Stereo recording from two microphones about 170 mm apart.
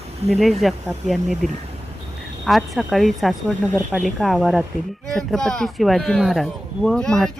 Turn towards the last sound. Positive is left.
turn(degrees=5)  # may be behind; listen again after turning